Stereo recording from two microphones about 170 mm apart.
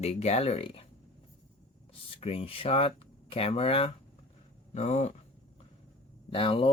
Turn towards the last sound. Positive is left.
turn(degrees=30)  # may be behind; listen again after turning